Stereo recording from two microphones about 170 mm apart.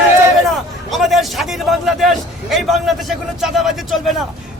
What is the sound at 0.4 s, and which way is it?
A man's voice, centre (ahead or behind).